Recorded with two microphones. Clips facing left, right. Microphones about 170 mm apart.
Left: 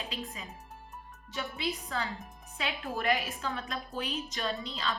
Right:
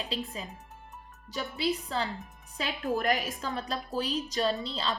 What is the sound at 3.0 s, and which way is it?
A woman's voice, 40° right (ahead or behind).